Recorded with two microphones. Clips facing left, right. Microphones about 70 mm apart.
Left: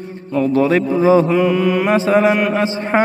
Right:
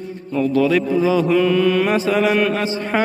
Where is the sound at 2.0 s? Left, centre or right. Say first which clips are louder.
Left 3 dB; left.